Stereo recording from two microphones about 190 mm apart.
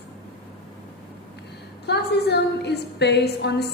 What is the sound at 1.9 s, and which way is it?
A woman's voice, 60° left (ahead or behind).